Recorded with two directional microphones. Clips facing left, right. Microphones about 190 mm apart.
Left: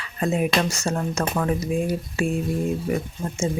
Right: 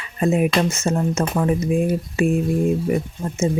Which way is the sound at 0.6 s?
20° right (ahead or behind).